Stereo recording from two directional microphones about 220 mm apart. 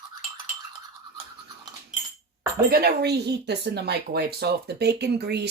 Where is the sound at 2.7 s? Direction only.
45° right (ahead or behind).